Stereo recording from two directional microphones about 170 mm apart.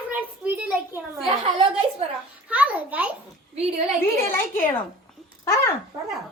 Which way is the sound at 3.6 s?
35° right (ahead or behind).